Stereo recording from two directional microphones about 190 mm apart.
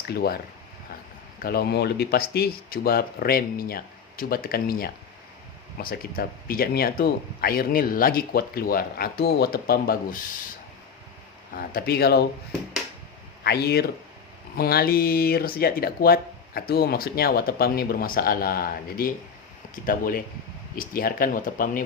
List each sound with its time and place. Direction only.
0.1 s speech: 55° left (ahead or behind)
1.4 s speech: 55° left (ahead or behind)
11.5 s speech: 50° left (ahead or behind)
13.4 s speech: 55° left (ahead or behind)